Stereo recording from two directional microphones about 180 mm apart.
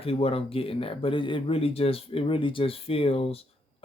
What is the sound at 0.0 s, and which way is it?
Speech, 30° left (ahead or behind).